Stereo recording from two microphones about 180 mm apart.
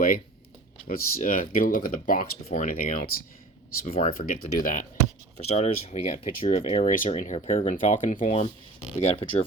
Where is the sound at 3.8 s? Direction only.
35° left (ahead or behind).